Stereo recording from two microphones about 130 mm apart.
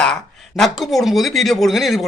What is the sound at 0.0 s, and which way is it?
Speech, 5° left (ahead or behind).